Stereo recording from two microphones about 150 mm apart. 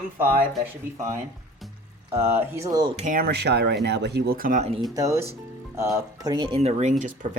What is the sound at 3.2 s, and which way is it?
Speech, 90° right.